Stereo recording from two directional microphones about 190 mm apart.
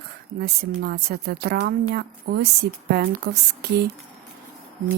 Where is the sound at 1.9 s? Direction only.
55° right (ahead or behind).